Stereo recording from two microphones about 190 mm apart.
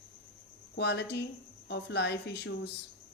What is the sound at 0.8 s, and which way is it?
Speech, 65° left (ahead or behind).